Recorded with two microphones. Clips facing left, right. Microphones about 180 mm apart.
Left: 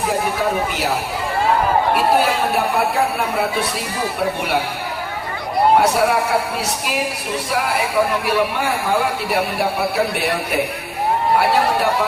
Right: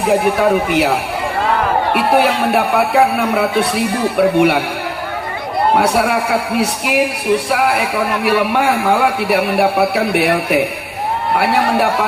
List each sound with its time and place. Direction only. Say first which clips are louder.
0.3 s speech: right 7 dB; 60° right (ahead or behind)
5.7 s speech: right 2 dB; 60° right (ahead or behind)